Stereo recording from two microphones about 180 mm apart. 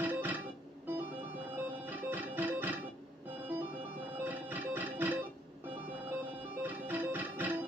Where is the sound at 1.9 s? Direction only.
10° right (ahead or behind).